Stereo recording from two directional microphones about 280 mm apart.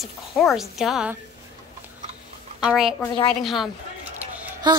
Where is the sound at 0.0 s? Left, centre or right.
Centre.